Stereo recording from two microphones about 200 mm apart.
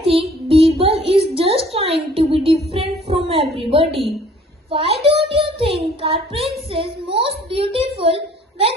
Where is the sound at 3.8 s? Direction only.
Centre (ahead or behind).